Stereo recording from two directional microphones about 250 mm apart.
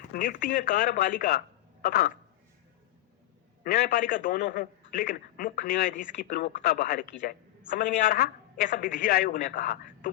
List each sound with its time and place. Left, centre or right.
0.1 s a man's voice: left
3.6 s a man's voice: left